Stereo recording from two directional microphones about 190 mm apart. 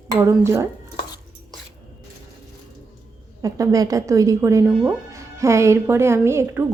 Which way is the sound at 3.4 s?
15° right (ahead or behind).